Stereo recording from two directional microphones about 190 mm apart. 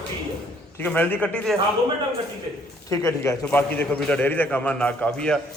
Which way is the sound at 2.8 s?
15° left (ahead or behind).